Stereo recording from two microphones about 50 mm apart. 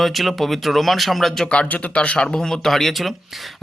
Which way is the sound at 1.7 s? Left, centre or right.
Left.